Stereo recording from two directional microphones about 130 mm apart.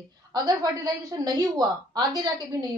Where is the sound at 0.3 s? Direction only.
30° right (ahead or behind).